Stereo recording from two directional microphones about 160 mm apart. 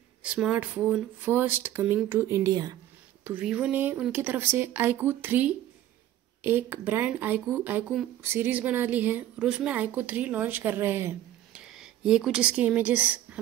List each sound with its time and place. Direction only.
0.2 s a woman's voice: 5° right (ahead or behind); by 2.8 s 25° right (ahead or behind)
3.3 s a woman's voice: 5° right (ahead or behind)
11.6 s speech: 5° right (ahead or behind)